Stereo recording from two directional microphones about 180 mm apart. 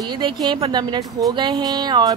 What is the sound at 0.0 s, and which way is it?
Speech, 25° right (ahead or behind).